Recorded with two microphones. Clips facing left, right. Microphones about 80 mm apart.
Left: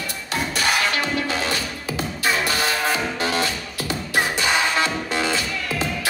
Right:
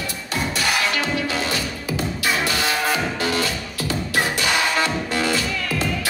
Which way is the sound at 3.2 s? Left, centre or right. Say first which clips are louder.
Even; left.